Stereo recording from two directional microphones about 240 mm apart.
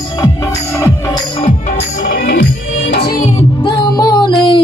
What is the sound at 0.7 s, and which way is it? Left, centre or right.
Music, centre.